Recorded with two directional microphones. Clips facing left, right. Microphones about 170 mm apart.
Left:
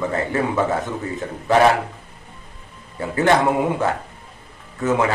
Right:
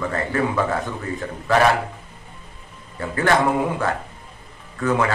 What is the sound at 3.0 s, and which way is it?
Speech, 20° left (ahead or behind).